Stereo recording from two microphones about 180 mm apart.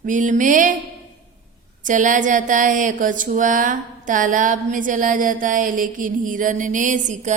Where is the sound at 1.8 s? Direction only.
45° right (ahead or behind).